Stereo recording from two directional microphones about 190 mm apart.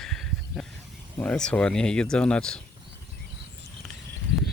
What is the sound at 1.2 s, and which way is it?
Speech, 5° left (ahead or behind).